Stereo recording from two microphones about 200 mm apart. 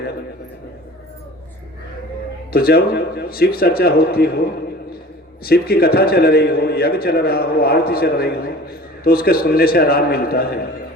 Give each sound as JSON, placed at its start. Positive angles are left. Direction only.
{"t": 2.5, "sound": "a man's voice", "side_deg": 50}